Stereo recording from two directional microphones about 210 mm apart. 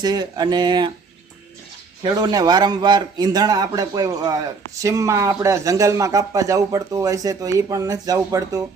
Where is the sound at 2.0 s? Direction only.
20° right (ahead or behind).